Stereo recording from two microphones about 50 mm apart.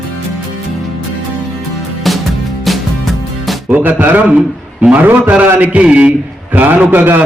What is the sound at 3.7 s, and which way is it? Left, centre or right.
A man's voice, right.